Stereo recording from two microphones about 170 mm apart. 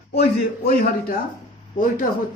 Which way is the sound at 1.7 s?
50° left (ahead or behind).